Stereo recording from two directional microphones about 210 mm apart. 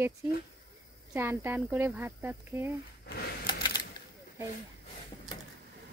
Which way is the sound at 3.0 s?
50° left (ahead or behind).